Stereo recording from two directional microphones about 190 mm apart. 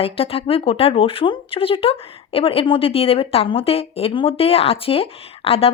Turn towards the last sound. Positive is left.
turn(degrees=30)  # may be behind; listen again after turning